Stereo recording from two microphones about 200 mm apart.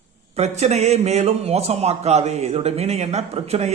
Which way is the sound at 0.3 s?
35° right (ahead or behind).